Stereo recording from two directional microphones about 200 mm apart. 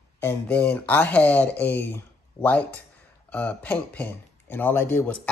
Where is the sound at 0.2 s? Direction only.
10° left (ahead or behind).